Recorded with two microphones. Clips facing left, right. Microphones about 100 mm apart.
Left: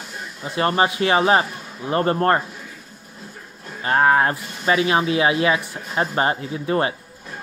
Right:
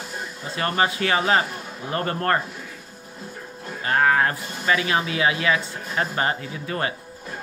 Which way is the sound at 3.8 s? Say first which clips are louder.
Left 3 dB; 30° left (ahead or behind).